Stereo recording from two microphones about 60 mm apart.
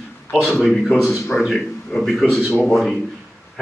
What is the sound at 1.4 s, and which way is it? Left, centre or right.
Speech, centre.